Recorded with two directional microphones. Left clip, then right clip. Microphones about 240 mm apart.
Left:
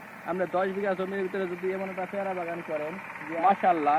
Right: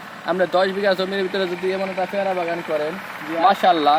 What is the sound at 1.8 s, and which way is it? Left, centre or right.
Speech, right.